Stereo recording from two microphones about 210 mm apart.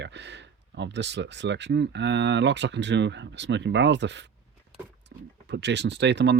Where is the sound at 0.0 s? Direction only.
55° right (ahead or behind).